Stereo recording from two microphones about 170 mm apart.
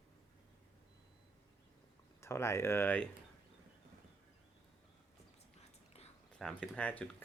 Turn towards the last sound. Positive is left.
turn(degrees=10)  # may be behind; listen again after turning